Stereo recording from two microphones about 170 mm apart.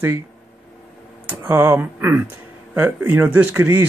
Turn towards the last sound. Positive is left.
turn(degrees=-10)  # may be behind; listen again after turning